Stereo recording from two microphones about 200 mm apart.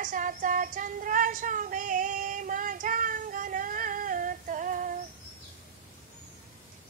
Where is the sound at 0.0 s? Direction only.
40° right (ahead or behind).